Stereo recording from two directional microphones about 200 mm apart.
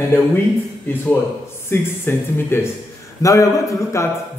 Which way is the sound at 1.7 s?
10° left (ahead or behind).